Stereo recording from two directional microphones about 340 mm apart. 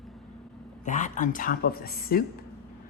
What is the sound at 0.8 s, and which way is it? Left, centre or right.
Speech, left.